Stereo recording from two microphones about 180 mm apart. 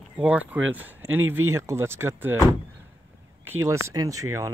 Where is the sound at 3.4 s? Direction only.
15° right (ahead or behind).